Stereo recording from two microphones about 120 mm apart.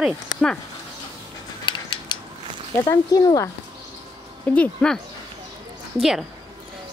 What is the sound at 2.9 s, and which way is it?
Speech, 30° left (ahead or behind).